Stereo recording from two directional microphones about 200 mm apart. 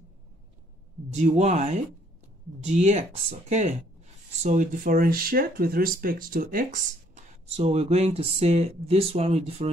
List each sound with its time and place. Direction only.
1.1 s speech: 35° right (ahead or behind)